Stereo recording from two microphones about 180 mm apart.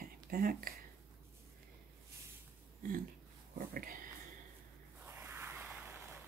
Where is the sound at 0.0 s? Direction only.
50° right (ahead or behind).